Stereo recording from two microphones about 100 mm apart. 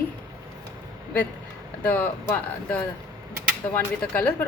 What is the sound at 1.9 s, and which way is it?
A woman's voice, 15° left (ahead or behind).